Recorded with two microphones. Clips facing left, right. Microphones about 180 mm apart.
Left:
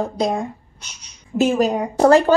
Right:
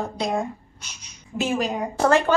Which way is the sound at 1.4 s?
40° left (ahead or behind).